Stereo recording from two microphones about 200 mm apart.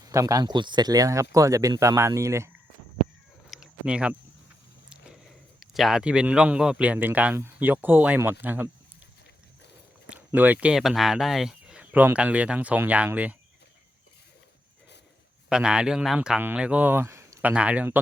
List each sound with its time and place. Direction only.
0.0 s a man's voice: 15° right (ahead or behind)
3.5 s a sound: 5° right (ahead or behind)
5.5 s a man's voice: centre (ahead or behind)
10.1 s speech: 10° right (ahead or behind)
15.4 s speech: 5° right (ahead or behind)